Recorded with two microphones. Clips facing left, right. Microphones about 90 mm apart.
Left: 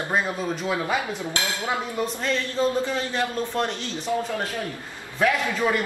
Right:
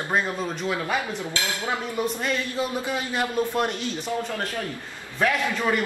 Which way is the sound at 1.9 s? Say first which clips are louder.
Even; 10° right (ahead or behind).